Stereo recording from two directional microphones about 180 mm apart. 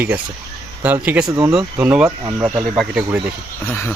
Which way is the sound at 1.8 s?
5° right (ahead or behind).